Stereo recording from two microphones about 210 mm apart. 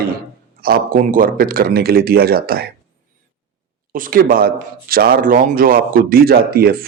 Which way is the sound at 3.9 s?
40° right (ahead or behind).